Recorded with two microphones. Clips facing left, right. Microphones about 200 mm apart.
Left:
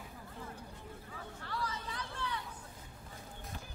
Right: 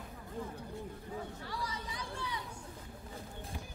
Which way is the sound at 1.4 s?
15° right (ahead or behind).